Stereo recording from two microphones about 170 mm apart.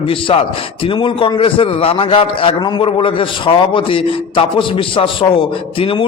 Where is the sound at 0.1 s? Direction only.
30° left (ahead or behind).